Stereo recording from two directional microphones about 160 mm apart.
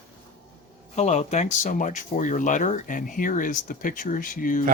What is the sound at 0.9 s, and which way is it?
Speech, 45° left (ahead or behind).